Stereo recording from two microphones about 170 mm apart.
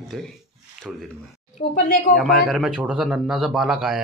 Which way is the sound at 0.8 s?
Centre (ahead or behind).